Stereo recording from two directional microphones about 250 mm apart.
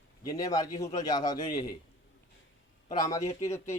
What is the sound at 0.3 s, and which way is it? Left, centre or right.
Speech, centre.